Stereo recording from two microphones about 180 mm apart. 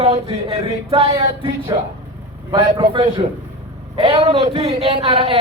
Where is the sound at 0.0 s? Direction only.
30° right (ahead or behind).